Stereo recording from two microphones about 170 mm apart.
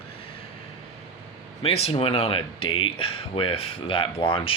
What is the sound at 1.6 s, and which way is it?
Speech, 35° left (ahead or behind).